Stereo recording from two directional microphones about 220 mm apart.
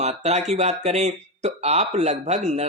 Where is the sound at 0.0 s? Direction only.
30° right (ahead or behind).